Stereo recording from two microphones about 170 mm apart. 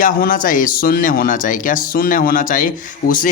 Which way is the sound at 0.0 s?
55° left (ahead or behind).